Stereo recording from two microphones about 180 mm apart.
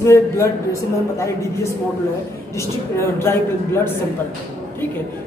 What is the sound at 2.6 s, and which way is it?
A woman's voice, 15° left (ahead or behind).